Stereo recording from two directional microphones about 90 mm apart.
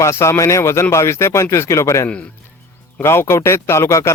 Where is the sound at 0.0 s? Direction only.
30° left (ahead or behind).